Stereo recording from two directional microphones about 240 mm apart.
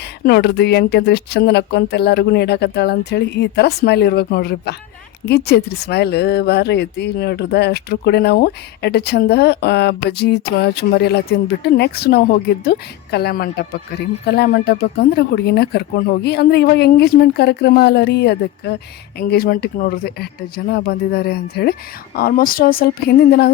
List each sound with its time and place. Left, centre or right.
0.3 s a woman's voice: left